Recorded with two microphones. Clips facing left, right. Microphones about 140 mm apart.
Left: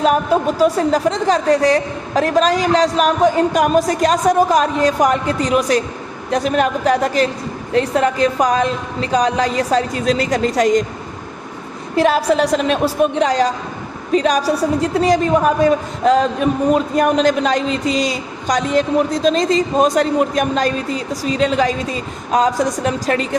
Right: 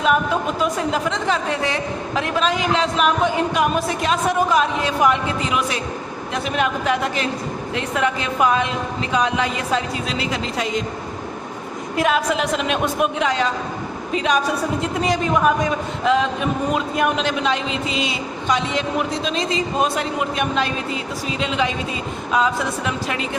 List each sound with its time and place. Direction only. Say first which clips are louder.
0.0 s a woman's voice: left 4 dB; 40° left (ahead or behind)
11.9 s a woman's voice: left 5 dB; 35° left (ahead or behind)